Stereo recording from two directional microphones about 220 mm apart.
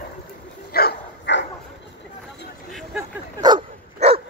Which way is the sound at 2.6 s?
Centre (ahead or behind).